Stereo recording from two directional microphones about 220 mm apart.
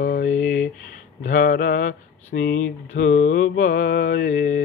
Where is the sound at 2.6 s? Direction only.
55° left (ahead or behind).